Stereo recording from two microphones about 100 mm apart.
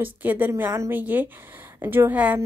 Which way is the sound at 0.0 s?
20° right (ahead or behind).